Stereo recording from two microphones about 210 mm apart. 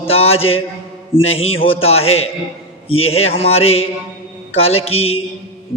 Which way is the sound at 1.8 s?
30° left (ahead or behind).